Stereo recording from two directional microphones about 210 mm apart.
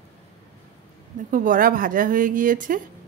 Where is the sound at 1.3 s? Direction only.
40° right (ahead or behind).